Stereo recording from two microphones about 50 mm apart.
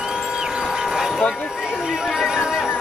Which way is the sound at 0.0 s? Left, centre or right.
Centre.